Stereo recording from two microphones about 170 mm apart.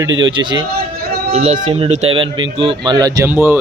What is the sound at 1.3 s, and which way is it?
Speech, 40° right (ahead or behind).